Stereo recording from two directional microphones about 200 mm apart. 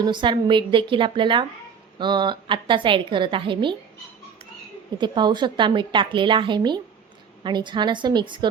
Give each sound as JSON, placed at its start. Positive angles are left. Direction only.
{"t": 0.0, "sound": "a woman's voice", "side_deg": -25}
{"t": 4.9, "sound": "a woman's voice", "side_deg": -20}